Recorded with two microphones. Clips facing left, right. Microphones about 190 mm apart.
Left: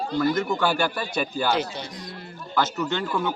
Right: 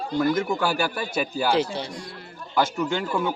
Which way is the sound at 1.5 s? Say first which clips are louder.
Right 3 dB; 30° right (ahead or behind).